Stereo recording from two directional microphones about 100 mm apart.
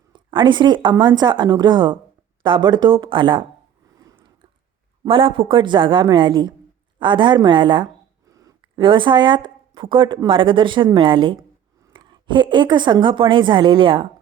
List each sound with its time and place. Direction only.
0.1 s a woman's voice: 50° right (ahead or behind)
5.0 s a woman's voice: 60° right (ahead or behind)
8.3 s a sound: 35° right (ahead or behind)
8.8 s a woman's voice: 55° right (ahead or behind)